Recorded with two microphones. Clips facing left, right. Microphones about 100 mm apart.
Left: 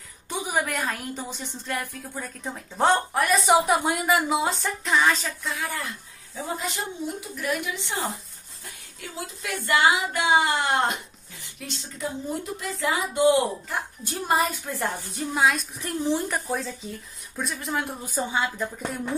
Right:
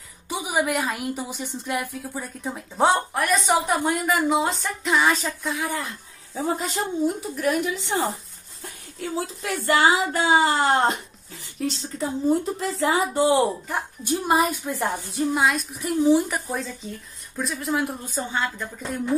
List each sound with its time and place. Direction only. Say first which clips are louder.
0.3 s a woman's voice: right 3 dB; 5° right (ahead or behind)
5.0 s speech: right 2 dB; 15° right (ahead or behind)
6.3 s speech: right 5 dB; 35° right (ahead or behind)
9.0 s speech: right 7 dB; 35° right (ahead or behind)
14.2 s speech: right 2 dB; 15° right (ahead or behind)
15.0 s a woman's voice: right 1 dB; centre (ahead or behind)
18.0 s speech: even; 10° left (ahead or behind)